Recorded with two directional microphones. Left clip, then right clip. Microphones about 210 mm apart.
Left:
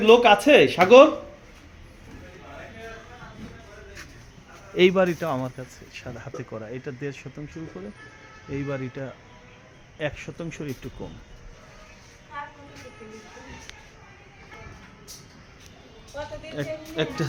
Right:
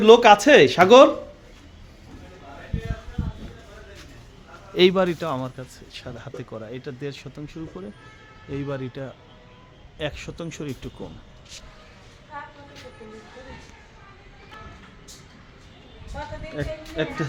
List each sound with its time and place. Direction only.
0.0 s speech: 25° right (ahead or behind)
4.7 s speech: centre (ahead or behind)
7.8 s speech: 10° right (ahead or behind)
16.6 s speech: 5° right (ahead or behind)